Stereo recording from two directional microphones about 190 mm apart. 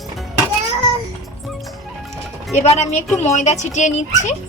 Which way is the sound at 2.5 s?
35° left (ahead or behind).